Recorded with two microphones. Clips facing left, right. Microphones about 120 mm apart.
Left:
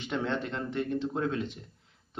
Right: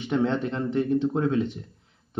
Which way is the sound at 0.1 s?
20° right (ahead or behind).